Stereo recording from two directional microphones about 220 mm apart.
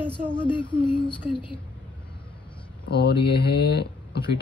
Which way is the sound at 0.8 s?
20° left (ahead or behind).